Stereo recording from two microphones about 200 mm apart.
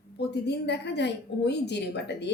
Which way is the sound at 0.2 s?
55° left (ahead or behind).